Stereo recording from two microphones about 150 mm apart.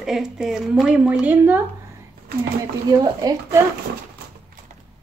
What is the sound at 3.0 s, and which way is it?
Speech, 25° right (ahead or behind).